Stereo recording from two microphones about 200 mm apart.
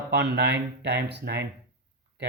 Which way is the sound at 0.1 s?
60° right (ahead or behind).